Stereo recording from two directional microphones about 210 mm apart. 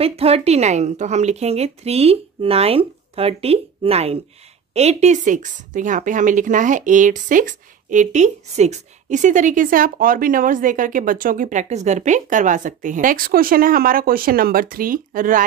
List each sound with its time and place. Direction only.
0.0 s a woman's voice: 30° right (ahead or behind)